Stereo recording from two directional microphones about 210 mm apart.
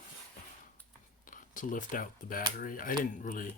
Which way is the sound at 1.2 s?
40° left (ahead or behind).